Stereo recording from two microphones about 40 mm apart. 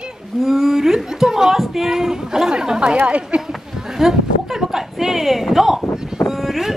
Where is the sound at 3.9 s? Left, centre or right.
Centre.